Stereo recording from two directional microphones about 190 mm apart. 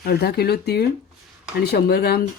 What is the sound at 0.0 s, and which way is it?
Speech, 55° left (ahead or behind).